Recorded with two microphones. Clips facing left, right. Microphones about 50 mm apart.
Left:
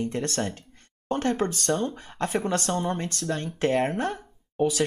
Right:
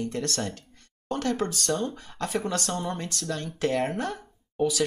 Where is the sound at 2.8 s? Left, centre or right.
Left.